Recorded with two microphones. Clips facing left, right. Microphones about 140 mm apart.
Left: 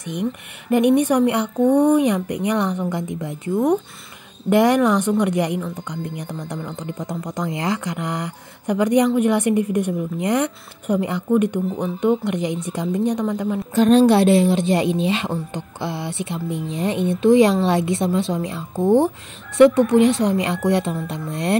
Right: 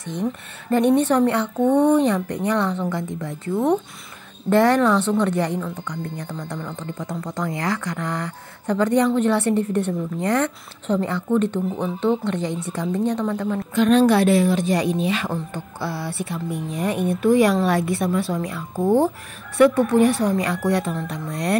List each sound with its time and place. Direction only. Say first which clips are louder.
0.7 s speech: left 1 dB; 15° left (ahead or behind)
13.7 s a woman's voice: left 2 dB; 35° left (ahead or behind)
18.8 s speech: left 2 dB; 10° right (ahead or behind)
19.0 s a woman's voice: even; 20° left (ahead or behind)